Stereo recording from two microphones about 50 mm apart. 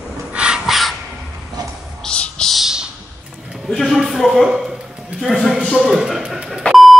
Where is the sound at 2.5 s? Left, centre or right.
Centre.